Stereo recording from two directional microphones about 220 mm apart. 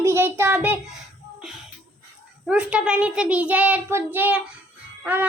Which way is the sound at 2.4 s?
5° right (ahead or behind).